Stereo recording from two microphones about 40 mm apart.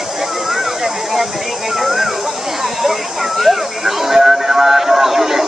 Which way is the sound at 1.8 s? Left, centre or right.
Centre.